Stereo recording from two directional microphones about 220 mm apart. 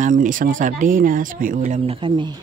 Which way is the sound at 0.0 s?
35° right (ahead or behind).